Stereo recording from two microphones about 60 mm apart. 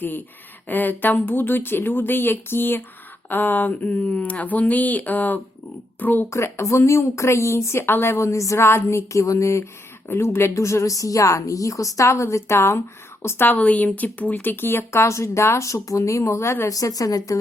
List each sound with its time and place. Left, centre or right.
0.7 s speech: left
6.3 s speech: left
8.5 s a woman's voice: left
13.2 s speech: left
16.6 s a woman's voice: left